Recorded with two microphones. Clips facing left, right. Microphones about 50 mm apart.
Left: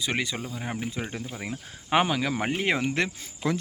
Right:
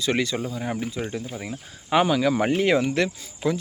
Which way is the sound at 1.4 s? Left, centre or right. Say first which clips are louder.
Right 1 dB; left.